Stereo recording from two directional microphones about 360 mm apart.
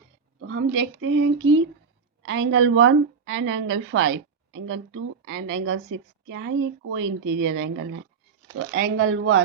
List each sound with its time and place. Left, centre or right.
0.3 s a woman's voice: right
5.7 s speech: right
6.3 s a woman's voice: right
7.0 s speech: right
7.4 s a woman's voice: right